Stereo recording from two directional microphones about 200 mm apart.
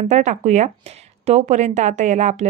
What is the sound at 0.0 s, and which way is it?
Speech, 35° right (ahead or behind).